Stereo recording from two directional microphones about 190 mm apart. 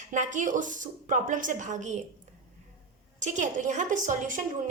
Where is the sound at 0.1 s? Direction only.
40° right (ahead or behind).